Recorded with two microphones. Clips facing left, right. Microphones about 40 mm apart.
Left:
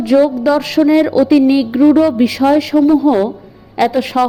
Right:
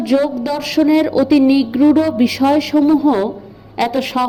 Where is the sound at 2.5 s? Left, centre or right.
Centre.